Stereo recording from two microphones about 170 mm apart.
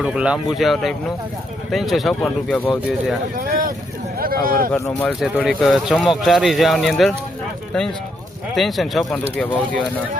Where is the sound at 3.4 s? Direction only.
55° right (ahead or behind).